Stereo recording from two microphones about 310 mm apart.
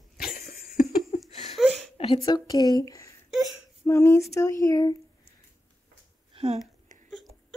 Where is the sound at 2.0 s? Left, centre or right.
Centre.